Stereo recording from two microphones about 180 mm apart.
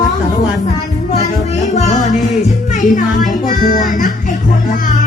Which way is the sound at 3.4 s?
50° left (ahead or behind).